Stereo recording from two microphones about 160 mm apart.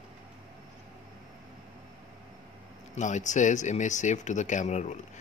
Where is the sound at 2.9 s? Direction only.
50° left (ahead or behind).